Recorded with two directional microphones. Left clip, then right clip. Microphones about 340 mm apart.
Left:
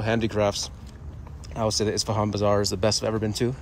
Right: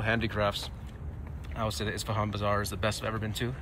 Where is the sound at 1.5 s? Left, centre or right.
Centre.